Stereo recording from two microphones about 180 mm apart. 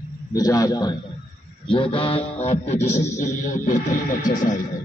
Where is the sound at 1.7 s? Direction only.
30° left (ahead or behind); by 4.5 s 50° left (ahead or behind).